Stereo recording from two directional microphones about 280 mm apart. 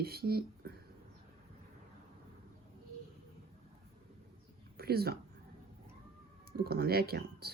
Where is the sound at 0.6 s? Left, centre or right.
Right.